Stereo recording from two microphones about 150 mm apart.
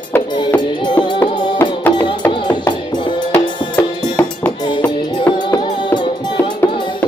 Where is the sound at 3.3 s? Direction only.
15° left (ahead or behind).